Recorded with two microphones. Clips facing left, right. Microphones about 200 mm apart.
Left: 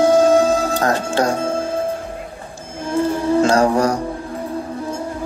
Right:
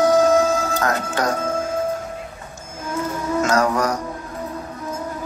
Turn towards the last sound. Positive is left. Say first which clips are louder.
# left 4 dB
turn(degrees=30)  # may be behind; listen again after turning